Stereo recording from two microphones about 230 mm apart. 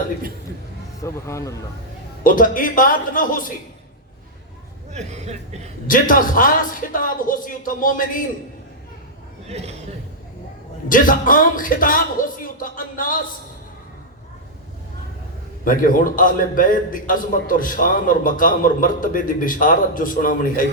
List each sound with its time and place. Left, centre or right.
1.0 s speech: centre
2.2 s a man's voice: left
4.9 s speech: right
5.9 s a man's voice: left
9.5 s speech: right
10.8 s a man's voice: left
15.6 s a man's voice: left